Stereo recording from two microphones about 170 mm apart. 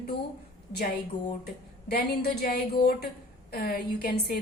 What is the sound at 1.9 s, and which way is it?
A woman's voice, 70° left (ahead or behind).